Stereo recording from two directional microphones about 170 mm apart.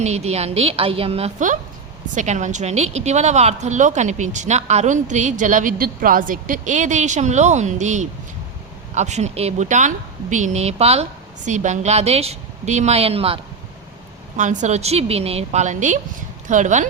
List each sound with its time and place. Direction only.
0.0 s a woman's voice: 40° right (ahead or behind)
14.3 s speech: 45° right (ahead or behind)